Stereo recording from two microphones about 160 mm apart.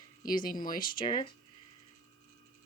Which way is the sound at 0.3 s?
60° left (ahead or behind).